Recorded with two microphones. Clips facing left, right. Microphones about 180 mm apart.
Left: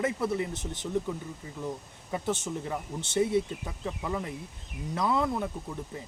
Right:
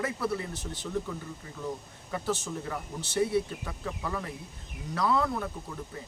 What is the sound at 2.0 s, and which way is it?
Speech, 20° left (ahead or behind).